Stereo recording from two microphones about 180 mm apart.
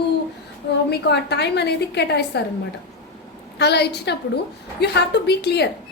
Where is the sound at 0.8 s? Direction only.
65° left (ahead or behind).